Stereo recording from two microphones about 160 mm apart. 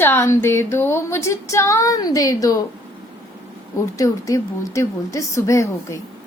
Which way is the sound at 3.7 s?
20° left (ahead or behind).